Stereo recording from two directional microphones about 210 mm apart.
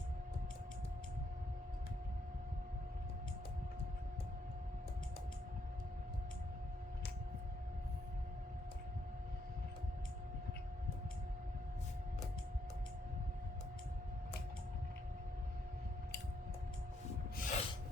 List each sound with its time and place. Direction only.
17.3 s snort: 35° left (ahead or behind)